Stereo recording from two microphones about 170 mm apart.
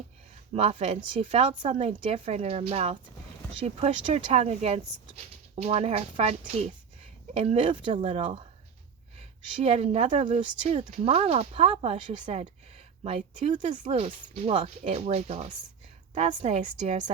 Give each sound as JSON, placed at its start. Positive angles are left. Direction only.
{"t": 0.5, "sound": "speech", "side_deg": -35}
{"t": 9.5, "sound": "speech", "side_deg": -35}